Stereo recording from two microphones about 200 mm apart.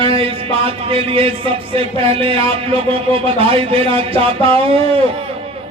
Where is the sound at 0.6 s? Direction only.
30° right (ahead or behind).